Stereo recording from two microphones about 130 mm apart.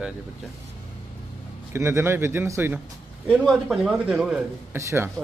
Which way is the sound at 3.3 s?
Centre (ahead or behind).